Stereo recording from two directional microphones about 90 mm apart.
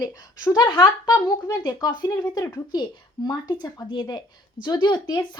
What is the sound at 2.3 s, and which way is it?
Speech, 40° left (ahead or behind).